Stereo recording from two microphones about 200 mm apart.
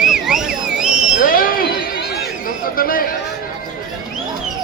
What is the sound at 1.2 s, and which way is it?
Chatter, 45° left (ahead or behind).